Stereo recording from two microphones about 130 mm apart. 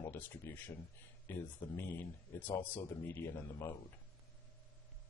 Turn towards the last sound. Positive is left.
turn(degrees=20)  # may be behind; listen again after turning